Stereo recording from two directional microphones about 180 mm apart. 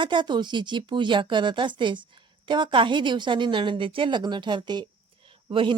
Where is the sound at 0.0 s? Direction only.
25° right (ahead or behind).